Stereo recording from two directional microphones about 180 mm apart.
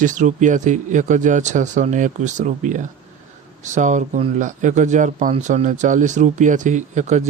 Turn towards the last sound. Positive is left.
turn(degrees=-40)  # may be behind; listen again after turning